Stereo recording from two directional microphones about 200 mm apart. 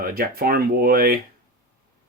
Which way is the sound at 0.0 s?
50° right (ahead or behind).